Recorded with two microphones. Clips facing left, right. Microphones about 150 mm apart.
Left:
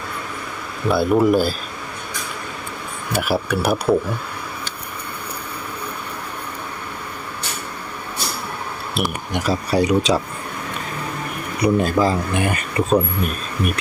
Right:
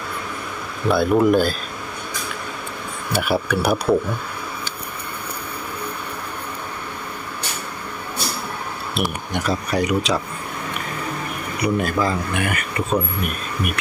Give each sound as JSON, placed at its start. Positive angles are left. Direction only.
{"t": 0.9, "sound": "speech", "side_deg": 5}
{"t": 3.1, "sound": "speech", "side_deg": 0}
{"t": 9.0, "sound": "speech", "side_deg": 0}
{"t": 9.6, "sound": "speech", "side_deg": 35}
{"t": 11.6, "sound": "speech", "side_deg": 30}